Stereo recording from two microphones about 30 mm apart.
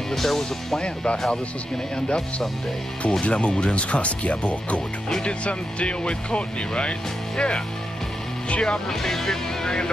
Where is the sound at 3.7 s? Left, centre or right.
Left.